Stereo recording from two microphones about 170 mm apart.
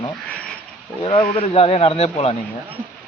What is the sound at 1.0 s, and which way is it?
Speech, 30° left (ahead or behind).